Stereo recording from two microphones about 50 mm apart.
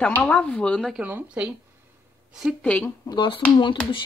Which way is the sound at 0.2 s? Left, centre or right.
Centre.